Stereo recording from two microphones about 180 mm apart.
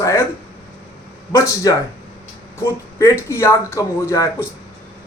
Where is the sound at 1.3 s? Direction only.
15° left (ahead or behind).